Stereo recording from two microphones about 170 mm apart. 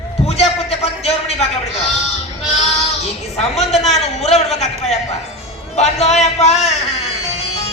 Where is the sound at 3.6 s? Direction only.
40° left (ahead or behind).